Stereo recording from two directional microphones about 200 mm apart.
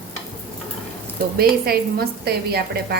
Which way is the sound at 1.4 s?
50° right (ahead or behind).